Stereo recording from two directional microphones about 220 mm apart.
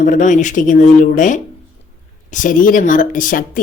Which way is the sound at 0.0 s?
35° left (ahead or behind).